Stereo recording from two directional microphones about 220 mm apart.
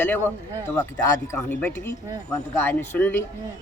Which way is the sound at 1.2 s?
10° left (ahead or behind).